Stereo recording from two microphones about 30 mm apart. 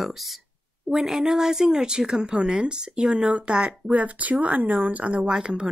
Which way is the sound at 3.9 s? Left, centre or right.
Right.